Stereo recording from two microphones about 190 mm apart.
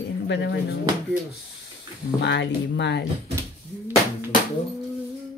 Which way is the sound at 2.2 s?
65° left (ahead or behind).